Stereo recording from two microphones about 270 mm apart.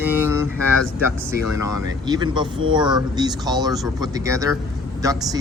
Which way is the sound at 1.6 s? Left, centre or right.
Centre.